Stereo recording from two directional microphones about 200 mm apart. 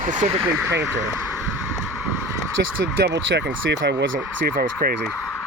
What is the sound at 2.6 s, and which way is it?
Speech, 55° right (ahead or behind).